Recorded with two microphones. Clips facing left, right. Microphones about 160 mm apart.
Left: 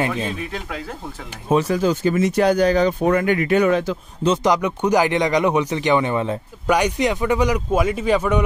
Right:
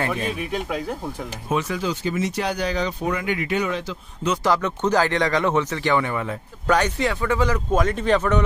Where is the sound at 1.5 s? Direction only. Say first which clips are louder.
Left 7 dB; 35° left (ahead or behind); by 4.0 s 50° left (ahead or behind).